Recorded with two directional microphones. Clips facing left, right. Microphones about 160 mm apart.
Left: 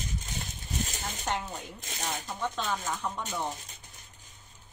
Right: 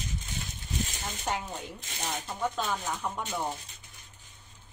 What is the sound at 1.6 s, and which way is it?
Speech, 40° left (ahead or behind).